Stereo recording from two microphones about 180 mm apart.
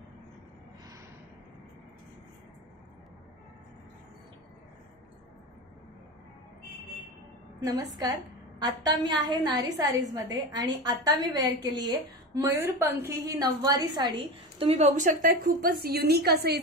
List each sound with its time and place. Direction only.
8.0 s a woman's voice: 20° right (ahead or behind)
14.6 s a woman's voice: 35° right (ahead or behind); by 16.5 s 60° right (ahead or behind)